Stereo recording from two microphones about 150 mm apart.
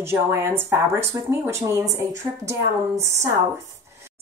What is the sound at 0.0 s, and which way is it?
A woman's voice, 15° right (ahead or behind).